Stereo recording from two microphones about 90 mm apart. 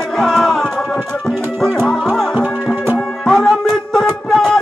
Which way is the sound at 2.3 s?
20° right (ahead or behind).